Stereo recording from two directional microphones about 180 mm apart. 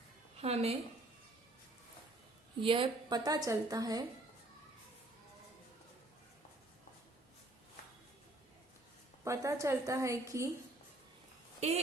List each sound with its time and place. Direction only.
0.3 s a woman's voice: 35° right (ahead or behind)
2.6 s a woman's voice: 30° right (ahead or behind)
9.2 s a woman's voice: 15° right (ahead or behind)